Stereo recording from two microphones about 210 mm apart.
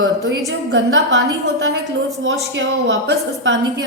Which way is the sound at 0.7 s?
60° right (ahead or behind).